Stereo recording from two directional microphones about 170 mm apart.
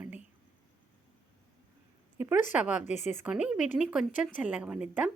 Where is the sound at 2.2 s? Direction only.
15° right (ahead or behind).